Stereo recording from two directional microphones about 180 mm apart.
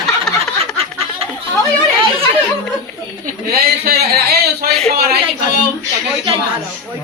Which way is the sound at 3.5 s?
60° right (ahead or behind).